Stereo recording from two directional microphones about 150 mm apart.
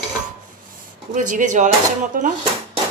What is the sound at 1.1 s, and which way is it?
Speech, 60° right (ahead or behind).